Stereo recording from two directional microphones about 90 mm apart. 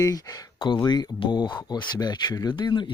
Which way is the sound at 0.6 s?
60° left (ahead or behind).